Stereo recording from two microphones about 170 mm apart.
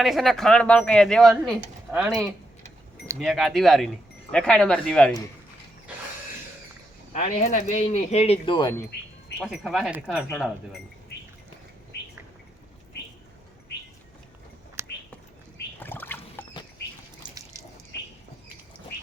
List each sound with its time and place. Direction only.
0.0 s speech: centre (ahead or behind)
7.1 s speech: 45° left (ahead or behind); by 8.7 s 30° left (ahead or behind)
9.4 s speech: centre (ahead or behind)
14.8 s whispering: 15° right (ahead or behind)
15.8 s rowboat: 10° left (ahead or behind)
17.2 s drip: 20° right (ahead or behind)